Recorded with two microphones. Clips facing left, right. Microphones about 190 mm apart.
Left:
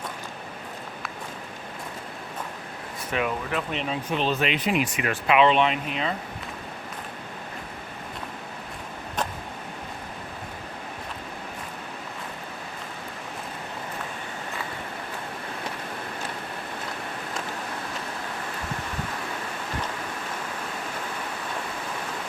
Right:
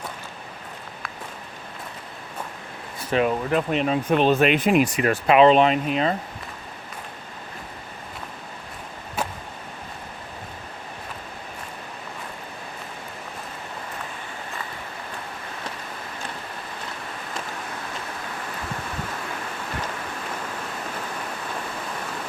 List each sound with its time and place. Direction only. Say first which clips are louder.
3.1 s speech: right 6 dB; 35° right (ahead or behind)